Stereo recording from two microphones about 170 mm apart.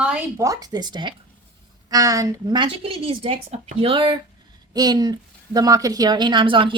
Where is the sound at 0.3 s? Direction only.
20° right (ahead or behind).